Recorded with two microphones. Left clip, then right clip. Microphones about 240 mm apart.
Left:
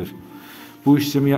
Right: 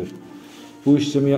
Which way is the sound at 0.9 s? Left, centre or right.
Left.